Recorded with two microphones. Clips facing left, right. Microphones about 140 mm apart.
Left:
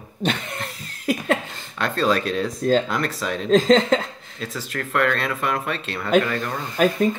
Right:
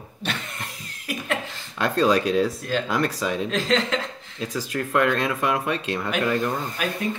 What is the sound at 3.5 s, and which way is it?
Speech, 45° left (ahead or behind).